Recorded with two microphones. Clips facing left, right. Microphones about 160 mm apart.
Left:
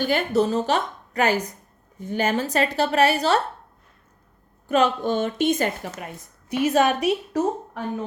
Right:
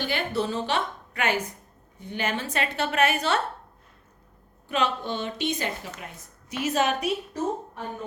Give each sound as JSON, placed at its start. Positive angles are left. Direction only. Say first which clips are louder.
{"t": 0.0, "sound": "a woman's voice", "louder": "left 7 dB", "side_deg": 45}
{"t": 4.7, "sound": "a woman's voice", "louder": "left 7 dB", "side_deg": 45}
{"t": 7.3, "sound": "a woman's voice", "louder": "left 5 dB", "side_deg": 85}